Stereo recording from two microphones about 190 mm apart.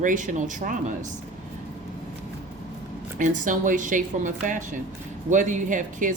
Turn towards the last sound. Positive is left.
turn(degrees=-40)  # may be behind; listen again after turning